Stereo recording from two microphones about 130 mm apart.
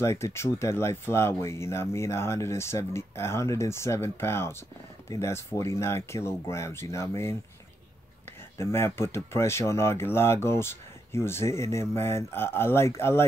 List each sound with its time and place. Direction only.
0.0 s speech: 20° left (ahead or behind)
8.5 s speech: 20° left (ahead or behind)